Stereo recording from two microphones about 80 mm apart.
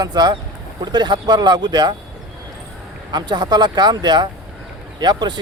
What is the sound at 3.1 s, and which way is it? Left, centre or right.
Speech, right.